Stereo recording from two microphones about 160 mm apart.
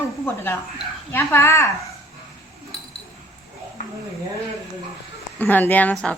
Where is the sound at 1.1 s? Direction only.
15° left (ahead or behind).